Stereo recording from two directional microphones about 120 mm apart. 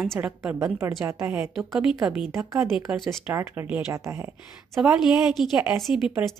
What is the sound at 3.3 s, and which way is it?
Speech, 15° right (ahead or behind).